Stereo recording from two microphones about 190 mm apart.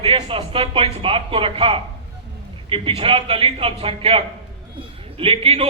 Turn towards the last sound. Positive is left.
turn(degrees=-30)  # may be behind; listen again after turning